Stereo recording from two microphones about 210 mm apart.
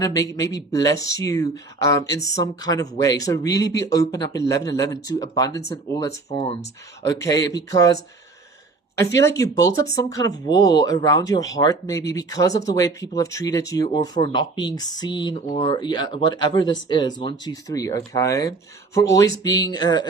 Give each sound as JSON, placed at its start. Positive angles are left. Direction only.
{"t": 0.0, "sound": "speech", "side_deg": 15}
{"t": 9.3, "sound": "speech", "side_deg": 15}